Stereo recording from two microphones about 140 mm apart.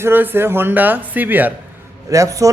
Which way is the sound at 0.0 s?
15° right (ahead or behind).